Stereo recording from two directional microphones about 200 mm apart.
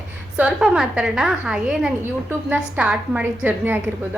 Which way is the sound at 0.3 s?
5° right (ahead or behind).